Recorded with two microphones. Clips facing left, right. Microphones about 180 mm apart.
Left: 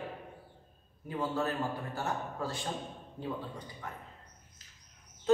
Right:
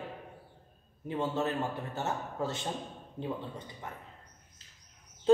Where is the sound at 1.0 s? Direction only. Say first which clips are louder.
Right 1 dB; 25° right (ahead or behind).